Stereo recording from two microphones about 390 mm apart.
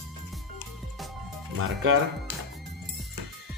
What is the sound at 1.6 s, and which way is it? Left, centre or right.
Speech, right.